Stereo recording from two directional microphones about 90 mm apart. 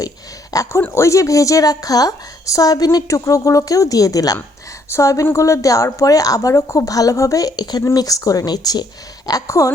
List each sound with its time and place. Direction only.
0.5 s a woman's voice: 40° left (ahead or behind)
0.8 s a woman's voice: 25° left (ahead or behind)